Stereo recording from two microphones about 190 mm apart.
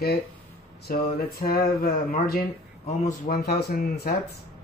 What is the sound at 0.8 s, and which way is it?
Speech, 55° left (ahead or behind).